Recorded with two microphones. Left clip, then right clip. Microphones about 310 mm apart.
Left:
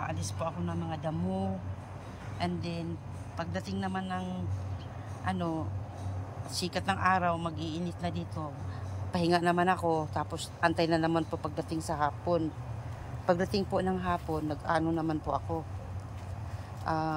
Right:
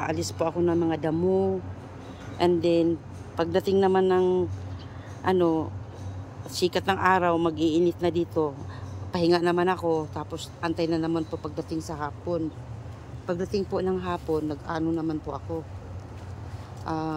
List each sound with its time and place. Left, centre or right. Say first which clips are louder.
0.0 s speech: right 8 dB; centre
16.8 s speech: right 1 dB; centre